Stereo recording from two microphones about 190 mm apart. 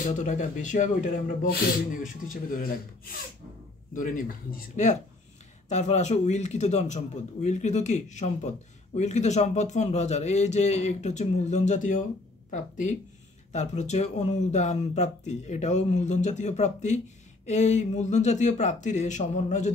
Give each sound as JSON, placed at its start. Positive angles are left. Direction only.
{"t": 0.0, "sound": "a man's voice", "side_deg": 40}